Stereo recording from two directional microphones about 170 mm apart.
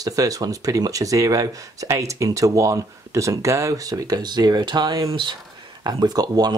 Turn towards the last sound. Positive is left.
turn(degrees=-20)  # may be behind; listen again after turning